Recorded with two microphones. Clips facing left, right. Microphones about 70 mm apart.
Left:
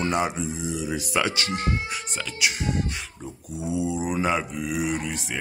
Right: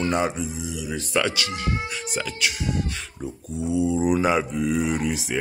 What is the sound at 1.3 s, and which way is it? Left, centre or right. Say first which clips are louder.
Speech: left 1 dB; left.